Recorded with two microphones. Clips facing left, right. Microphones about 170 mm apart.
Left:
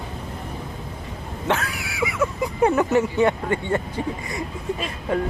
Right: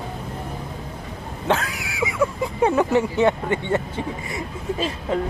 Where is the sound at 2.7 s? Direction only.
15° right (ahead or behind).